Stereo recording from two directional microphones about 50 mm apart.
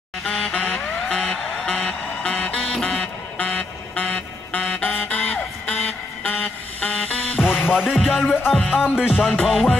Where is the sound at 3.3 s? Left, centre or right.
Left.